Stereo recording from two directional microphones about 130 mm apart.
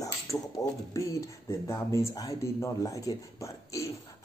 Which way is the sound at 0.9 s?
25° left (ahead or behind).